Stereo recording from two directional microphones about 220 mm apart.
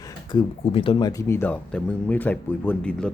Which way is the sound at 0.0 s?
15° left (ahead or behind).